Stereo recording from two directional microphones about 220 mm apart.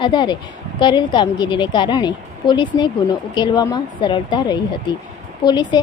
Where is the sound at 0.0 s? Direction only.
20° left (ahead or behind).